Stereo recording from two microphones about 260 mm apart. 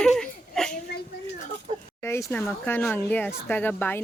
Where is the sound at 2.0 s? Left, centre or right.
Centre.